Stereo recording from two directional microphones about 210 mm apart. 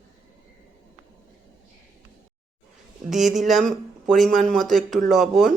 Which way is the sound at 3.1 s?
Centre (ahead or behind).